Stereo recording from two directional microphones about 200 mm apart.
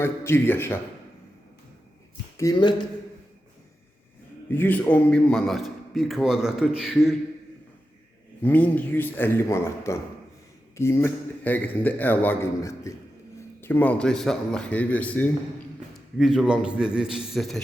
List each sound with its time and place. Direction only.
0.0 s a man's voice: 10° left (ahead or behind)
2.4 s speech: 20° left (ahead or behind)
4.4 s a man's voice: 10° left (ahead or behind)
8.4 s a man's voice: 10° left (ahead or behind)